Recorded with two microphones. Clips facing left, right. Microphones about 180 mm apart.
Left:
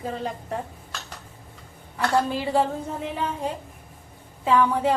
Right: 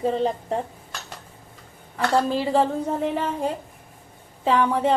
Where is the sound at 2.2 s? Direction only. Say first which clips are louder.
Right 4 dB; 35° right (ahead or behind).